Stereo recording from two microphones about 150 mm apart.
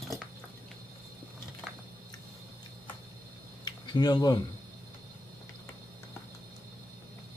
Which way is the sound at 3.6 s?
30° left (ahead or behind).